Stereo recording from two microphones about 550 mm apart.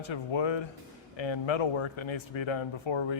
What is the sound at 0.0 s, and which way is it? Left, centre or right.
Speech, left.